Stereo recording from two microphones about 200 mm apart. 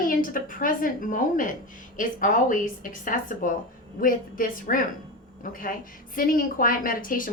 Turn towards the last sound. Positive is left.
turn(degrees=45)  # may be behind; listen again after turning